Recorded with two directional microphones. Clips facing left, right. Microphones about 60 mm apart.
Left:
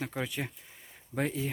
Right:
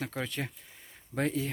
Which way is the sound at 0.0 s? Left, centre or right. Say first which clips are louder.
Even; centre.